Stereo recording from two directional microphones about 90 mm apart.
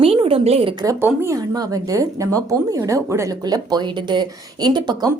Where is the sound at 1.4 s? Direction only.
40° right (ahead or behind).